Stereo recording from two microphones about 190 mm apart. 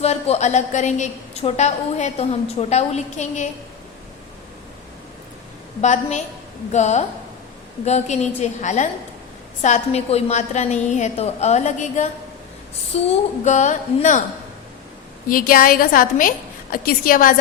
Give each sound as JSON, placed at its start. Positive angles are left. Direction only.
{"t": 0.0, "sound": "a woman's voice", "side_deg": 35}
{"t": 5.8, "sound": "a woman's voice", "side_deg": 40}
{"t": 15.3, "sound": "a woman's voice", "side_deg": 50}